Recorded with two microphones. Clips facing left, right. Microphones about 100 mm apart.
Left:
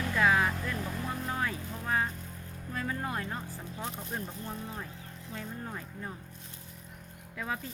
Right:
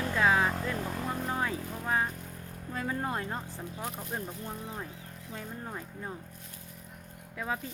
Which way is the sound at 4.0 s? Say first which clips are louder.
Right 1 dB; 5° right (ahead or behind).